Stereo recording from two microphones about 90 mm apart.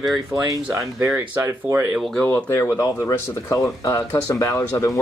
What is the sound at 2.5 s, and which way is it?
Speech, 30° left (ahead or behind).